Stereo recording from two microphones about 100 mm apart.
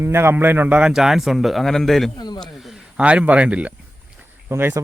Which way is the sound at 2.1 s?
45° left (ahead or behind).